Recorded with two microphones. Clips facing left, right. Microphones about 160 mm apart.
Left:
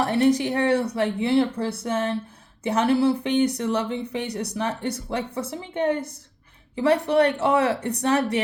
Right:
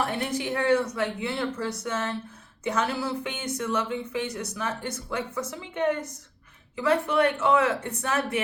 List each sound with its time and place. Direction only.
0.0 s speech: 40° left (ahead or behind)
7.2 s speech: 35° left (ahead or behind)